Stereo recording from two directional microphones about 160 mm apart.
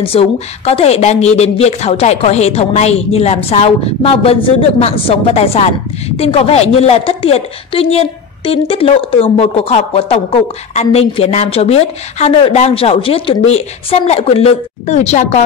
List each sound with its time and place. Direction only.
0.0 s speech: 35° left (ahead or behind)